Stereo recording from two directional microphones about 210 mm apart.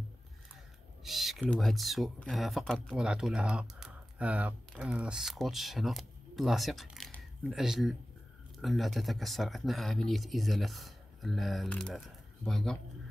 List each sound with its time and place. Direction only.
1.0 s speech: centre (ahead or behind)